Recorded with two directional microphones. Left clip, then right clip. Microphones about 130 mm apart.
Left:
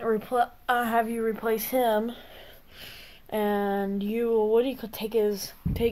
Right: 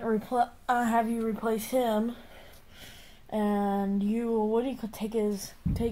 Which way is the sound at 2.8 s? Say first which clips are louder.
Left 6 dB; 25° left (ahead or behind).